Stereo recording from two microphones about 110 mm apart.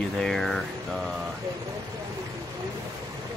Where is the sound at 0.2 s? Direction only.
Centre (ahead or behind).